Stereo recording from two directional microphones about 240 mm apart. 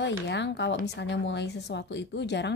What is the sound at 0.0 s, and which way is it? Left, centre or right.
A woman's voice, left.